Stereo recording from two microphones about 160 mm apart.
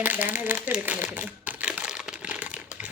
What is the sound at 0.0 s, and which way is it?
Crumpling, 10° right (ahead or behind).